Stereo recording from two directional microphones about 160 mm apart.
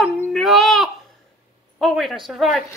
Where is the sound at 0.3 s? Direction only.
Centre (ahead or behind).